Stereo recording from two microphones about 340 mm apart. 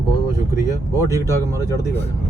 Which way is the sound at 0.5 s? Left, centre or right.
Centre.